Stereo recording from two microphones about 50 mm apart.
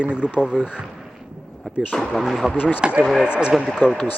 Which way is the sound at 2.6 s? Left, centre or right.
Left.